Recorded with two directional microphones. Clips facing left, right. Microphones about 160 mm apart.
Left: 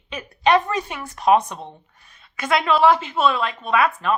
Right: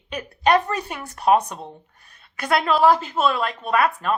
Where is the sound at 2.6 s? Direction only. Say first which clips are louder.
Left 1 dB; 40° right (ahead or behind).